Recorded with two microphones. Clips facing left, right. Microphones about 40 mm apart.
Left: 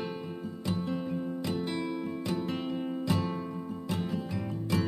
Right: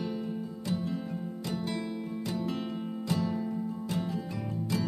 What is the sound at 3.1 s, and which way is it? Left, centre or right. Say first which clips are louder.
Music: right 1 dB; centre.